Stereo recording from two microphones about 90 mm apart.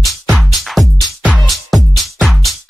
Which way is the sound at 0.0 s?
Centre (ahead or behind).